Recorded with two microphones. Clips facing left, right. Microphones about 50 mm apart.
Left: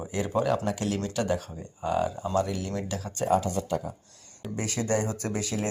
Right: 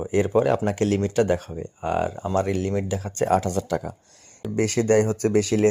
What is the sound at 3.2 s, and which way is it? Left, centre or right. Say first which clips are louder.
Speech: right 4 dB; right.